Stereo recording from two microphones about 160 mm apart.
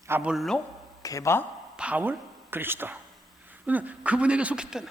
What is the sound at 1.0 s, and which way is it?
Speech, 20° left (ahead or behind).